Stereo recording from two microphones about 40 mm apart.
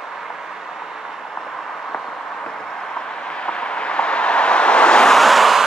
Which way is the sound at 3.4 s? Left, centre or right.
Left.